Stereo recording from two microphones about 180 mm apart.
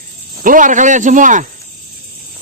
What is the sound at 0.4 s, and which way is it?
Speech, 45° right (ahead or behind).